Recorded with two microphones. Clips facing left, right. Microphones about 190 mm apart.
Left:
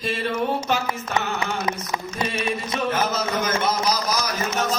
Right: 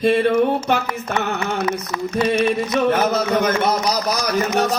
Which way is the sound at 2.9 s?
60° right (ahead or behind).